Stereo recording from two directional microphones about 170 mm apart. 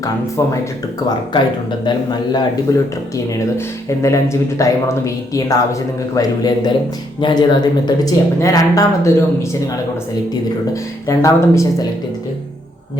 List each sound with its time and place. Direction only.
0.0 s speech: 20° left (ahead or behind)
1.8 s speech: 25° left (ahead or behind)
3.8 s speech: 15° left (ahead or behind)
11.0 s speech: 15° left (ahead or behind)